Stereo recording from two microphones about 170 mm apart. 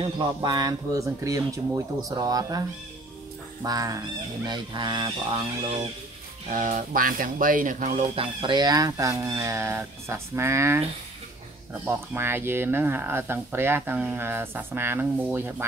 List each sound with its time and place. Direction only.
0.0 s speech: 30° right (ahead or behind)
3.6 s speech: 20° right (ahead or behind)
6.5 s speech: 50° right (ahead or behind); by 10.8 s 15° right (ahead or behind)
11.8 s speech: 10° right (ahead or behind)